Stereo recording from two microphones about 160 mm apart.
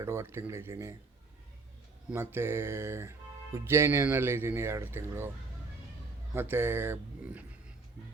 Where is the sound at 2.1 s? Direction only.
15° right (ahead or behind).